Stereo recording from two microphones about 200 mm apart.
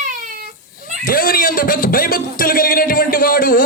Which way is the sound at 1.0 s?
45° left (ahead or behind).